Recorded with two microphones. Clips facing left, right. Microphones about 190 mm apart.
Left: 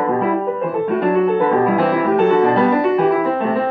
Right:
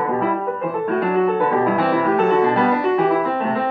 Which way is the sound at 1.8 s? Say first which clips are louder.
Left 2 dB; centre (ahead or behind).